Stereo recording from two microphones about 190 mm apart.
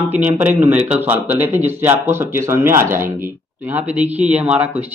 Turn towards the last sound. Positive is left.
turn(degrees=-5)  # may be behind; listen again after turning